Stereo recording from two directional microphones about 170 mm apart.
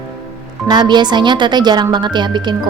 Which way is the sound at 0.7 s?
25° right (ahead or behind).